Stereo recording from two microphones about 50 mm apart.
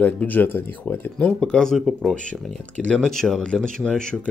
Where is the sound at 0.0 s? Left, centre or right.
Left.